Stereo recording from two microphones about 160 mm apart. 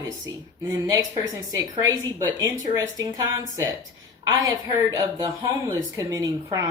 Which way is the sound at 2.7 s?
20° right (ahead or behind).